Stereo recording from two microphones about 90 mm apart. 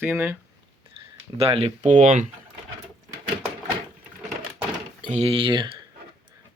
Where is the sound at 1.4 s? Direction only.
90° right.